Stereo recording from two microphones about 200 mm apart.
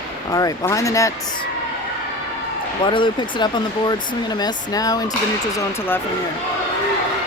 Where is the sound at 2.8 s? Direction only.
25° left (ahead or behind).